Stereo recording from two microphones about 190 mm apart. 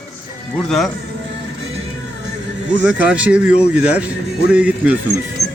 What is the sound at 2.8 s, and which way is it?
Speech, 5° right (ahead or behind).